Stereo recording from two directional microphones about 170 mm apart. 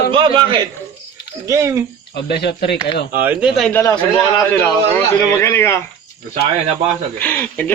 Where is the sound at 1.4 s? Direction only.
20° right (ahead or behind).